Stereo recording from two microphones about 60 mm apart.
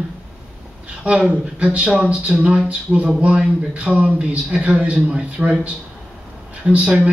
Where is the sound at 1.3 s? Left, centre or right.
Centre.